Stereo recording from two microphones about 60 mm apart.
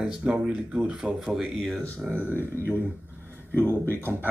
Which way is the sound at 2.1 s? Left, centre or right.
Right.